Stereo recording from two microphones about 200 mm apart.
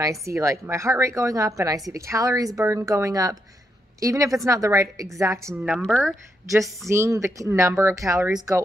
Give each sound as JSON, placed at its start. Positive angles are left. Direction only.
{"t": 0.0, "sound": "a woman's voice", "side_deg": -15}
{"t": 6.9, "sound": "a woman's voice", "side_deg": -15}